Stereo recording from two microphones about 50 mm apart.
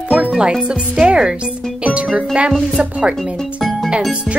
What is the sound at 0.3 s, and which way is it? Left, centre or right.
Speech, centre.